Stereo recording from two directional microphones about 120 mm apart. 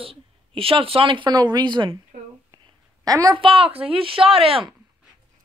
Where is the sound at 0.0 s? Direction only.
50° right (ahead or behind).